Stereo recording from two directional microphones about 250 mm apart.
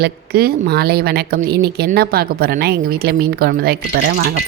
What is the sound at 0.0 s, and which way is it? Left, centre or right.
Speech, right.